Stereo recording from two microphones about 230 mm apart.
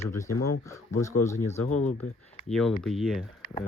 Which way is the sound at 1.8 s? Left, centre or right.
Left.